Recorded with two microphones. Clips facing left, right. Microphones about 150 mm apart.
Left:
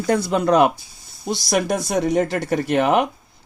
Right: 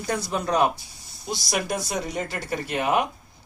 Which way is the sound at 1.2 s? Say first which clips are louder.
Left 7 dB; 50° left (ahead or behind).